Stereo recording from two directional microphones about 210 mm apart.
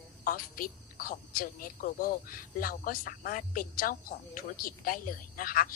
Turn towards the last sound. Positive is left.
turn(degrees=40)  # may be behind; listen again after turning